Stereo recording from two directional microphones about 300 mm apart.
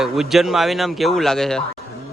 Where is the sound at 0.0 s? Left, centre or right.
Centre.